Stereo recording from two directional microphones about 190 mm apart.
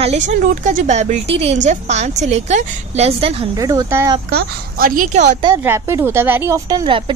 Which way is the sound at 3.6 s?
20° right (ahead or behind).